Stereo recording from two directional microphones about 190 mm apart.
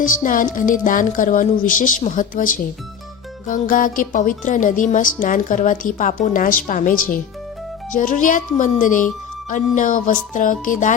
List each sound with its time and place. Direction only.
0.0 s speech: 45° left (ahead or behind)